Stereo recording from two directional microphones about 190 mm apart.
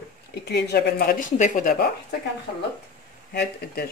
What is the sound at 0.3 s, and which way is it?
Speech, 60° left (ahead or behind).